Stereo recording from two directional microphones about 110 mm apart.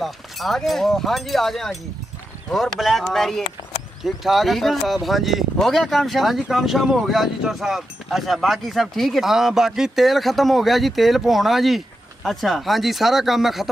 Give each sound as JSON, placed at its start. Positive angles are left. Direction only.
{"t": 0.0, "sound": "speech", "side_deg": 0}